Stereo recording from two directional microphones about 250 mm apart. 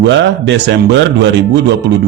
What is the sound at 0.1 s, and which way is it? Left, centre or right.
Speech, right.